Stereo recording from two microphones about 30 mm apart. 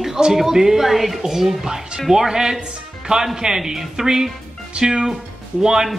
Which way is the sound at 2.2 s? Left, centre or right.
Right.